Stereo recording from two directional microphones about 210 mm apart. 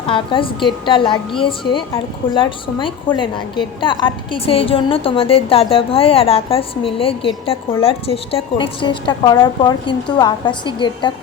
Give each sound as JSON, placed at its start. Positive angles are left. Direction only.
{"t": 0.1, "sound": "a woman's voice", "side_deg": 25}